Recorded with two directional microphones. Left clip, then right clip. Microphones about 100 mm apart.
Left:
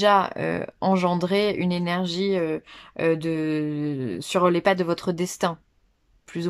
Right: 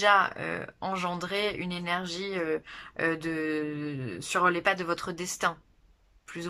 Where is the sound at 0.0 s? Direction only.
45° left (ahead or behind).